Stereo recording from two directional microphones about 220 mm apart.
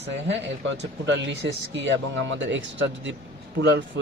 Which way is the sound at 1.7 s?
55° right (ahead or behind).